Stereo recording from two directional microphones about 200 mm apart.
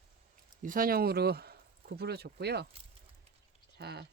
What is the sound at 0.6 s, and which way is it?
Speech, 45° right (ahead or behind).